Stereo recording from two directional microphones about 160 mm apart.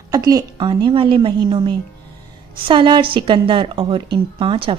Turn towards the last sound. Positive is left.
turn(degrees=-30)  # may be behind; listen again after turning